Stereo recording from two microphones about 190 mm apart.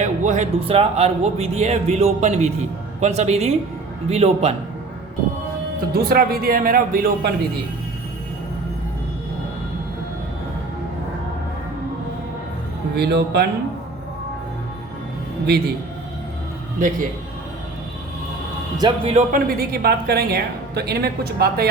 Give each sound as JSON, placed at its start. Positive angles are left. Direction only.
{"t": 0.0, "sound": "speech", "side_deg": -40}
{"t": 5.9, "sound": "a man's voice", "side_deg": -55}
{"t": 13.0, "sound": "a woman's voice", "side_deg": -60}
{"t": 15.4, "sound": "a woman's voice", "side_deg": -55}
{"t": 18.8, "sound": "a man's voice", "side_deg": -20}
{"t": 19.1, "sound": "a woman's voice", "side_deg": -45}